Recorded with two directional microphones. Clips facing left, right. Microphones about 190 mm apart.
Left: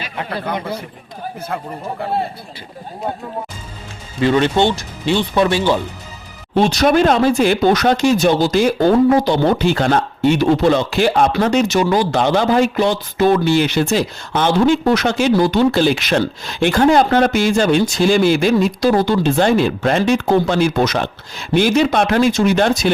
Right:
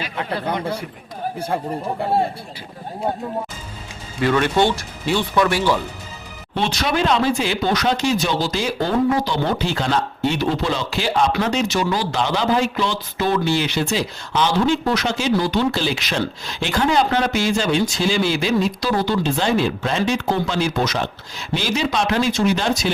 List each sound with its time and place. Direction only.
4.2 s speech: 25° left (ahead or behind)
6.6 s speech: 40° left (ahead or behind)